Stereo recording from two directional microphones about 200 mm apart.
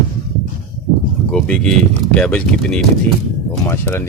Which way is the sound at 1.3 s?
5° left (ahead or behind).